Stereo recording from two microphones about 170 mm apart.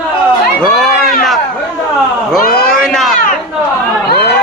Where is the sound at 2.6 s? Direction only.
5° left (ahead or behind).